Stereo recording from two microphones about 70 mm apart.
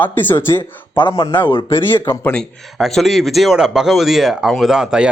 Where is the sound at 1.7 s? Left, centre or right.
Left.